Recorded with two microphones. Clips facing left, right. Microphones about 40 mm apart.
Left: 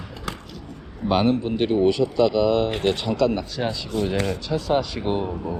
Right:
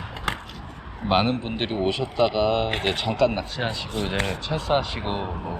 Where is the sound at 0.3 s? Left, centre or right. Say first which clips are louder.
Right 5 dB; right.